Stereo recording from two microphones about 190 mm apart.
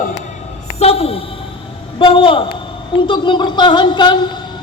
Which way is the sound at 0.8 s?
30° left (ahead or behind).